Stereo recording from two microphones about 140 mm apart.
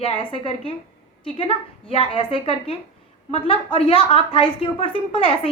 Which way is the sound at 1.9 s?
35° left (ahead or behind).